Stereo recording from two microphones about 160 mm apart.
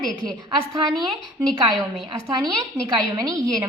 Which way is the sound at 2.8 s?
25° right (ahead or behind).